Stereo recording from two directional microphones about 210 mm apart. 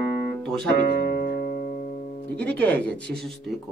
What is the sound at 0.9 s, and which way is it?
Music, 45° left (ahead or behind).